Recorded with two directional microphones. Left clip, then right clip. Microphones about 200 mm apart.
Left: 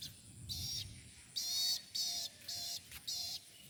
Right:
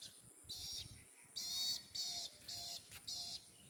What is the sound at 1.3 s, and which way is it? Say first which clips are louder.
Music: left 5 dB; 45° right (ahead or behind).